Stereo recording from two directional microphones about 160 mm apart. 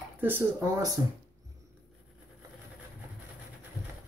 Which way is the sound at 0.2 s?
15° right (ahead or behind).